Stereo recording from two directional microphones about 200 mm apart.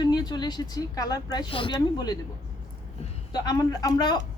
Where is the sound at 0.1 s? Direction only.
20° left (ahead or behind).